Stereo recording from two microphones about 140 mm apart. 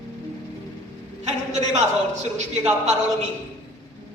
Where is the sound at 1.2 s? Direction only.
55° right (ahead or behind).